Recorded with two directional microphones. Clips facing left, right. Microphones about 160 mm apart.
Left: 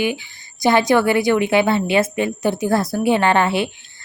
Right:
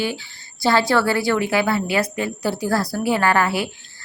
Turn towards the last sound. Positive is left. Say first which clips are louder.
# left 2 dB
turn(degrees=25)  # may be behind; listen again after turning